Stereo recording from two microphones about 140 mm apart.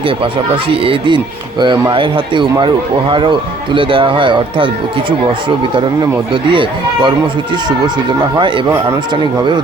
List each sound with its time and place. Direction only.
0.7 s speech: 40° right (ahead or behind)
6.3 s speech: 35° right (ahead or behind)
8.4 s speech: 35° right (ahead or behind)